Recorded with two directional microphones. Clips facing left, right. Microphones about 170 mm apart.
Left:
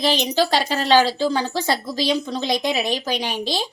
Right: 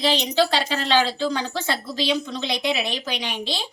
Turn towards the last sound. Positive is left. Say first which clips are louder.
# left 4 dB
turn(degrees=40)  # may be behind; listen again after turning